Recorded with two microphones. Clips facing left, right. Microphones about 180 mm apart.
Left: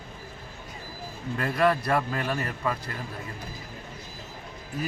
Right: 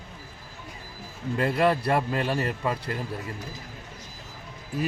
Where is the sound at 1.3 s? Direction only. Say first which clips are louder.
Right 1 dB; 25° right (ahead or behind).